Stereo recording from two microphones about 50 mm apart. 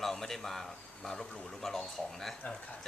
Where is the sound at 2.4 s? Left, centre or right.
Left.